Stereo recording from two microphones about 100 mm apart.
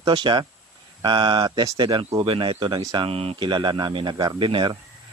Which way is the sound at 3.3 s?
50° right (ahead or behind).